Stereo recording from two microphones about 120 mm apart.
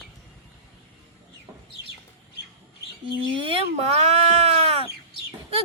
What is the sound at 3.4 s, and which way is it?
Sheep, 45° right (ahead or behind).